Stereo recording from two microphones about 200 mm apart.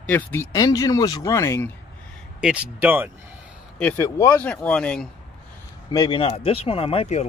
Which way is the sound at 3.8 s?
15° left (ahead or behind).